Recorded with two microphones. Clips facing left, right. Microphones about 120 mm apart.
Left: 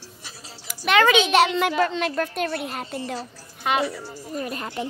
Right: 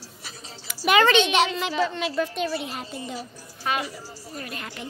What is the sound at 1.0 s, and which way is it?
Child singing, 5° left (ahead or behind).